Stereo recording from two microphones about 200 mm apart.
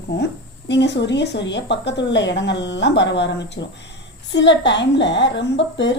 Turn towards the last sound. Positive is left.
turn(degrees=60)  # may be behind; listen again after turning